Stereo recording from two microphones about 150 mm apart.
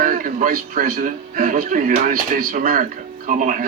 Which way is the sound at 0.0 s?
65° right (ahead or behind).